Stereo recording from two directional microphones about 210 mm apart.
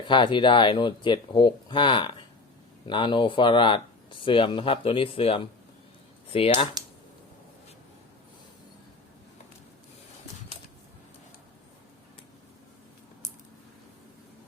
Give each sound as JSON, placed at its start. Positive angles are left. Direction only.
{"t": 0.1, "sound": "speech", "side_deg": 25}